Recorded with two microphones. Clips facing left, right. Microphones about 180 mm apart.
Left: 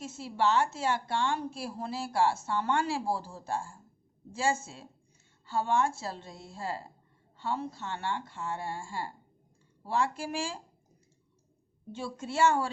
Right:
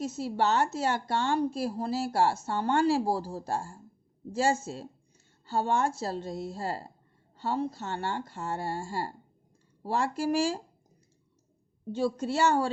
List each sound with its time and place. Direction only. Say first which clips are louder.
0.0 s speech: right 2 dB; 40° right (ahead or behind)
11.9 s speech: right 9 dB; 35° right (ahead or behind)